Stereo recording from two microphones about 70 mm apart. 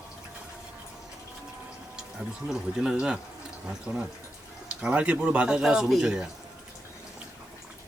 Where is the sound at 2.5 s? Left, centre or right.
Centre.